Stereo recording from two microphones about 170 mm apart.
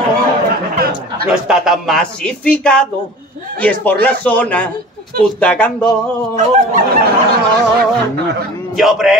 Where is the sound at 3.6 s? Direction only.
10° left (ahead or behind).